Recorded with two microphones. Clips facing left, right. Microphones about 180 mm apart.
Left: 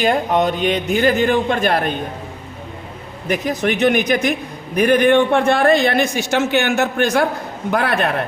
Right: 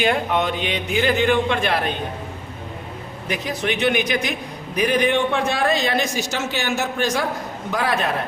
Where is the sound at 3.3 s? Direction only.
45° left (ahead or behind).